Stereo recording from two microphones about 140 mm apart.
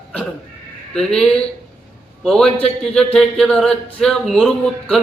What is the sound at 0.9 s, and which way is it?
A man's voice, 5° left (ahead or behind).